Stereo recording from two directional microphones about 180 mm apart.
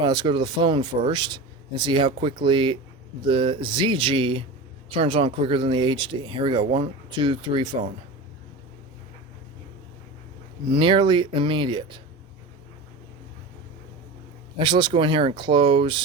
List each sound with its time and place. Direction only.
0.0 s speech: 25° right (ahead or behind)
10.7 s speech: 30° right (ahead or behind)
14.6 s speech: 25° right (ahead or behind)